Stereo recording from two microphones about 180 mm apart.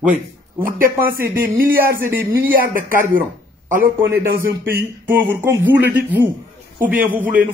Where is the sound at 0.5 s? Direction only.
55° right (ahead or behind).